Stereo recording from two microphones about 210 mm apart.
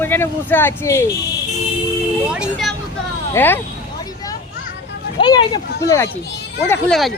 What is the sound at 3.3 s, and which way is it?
Speech, 10° left (ahead or behind).